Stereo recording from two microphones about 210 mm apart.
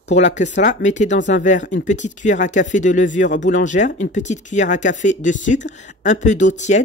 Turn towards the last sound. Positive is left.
turn(degrees=35)  # may be behind; listen again after turning